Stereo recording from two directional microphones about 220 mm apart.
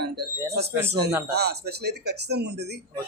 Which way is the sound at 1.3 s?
45° right (ahead or behind).